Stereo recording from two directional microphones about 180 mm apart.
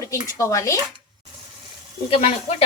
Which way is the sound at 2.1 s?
30° left (ahead or behind).